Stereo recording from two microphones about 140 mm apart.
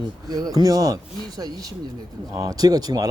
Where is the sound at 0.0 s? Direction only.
30° right (ahead or behind).